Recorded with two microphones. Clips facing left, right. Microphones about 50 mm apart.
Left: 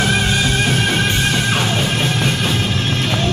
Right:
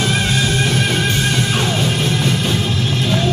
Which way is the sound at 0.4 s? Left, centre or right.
Left.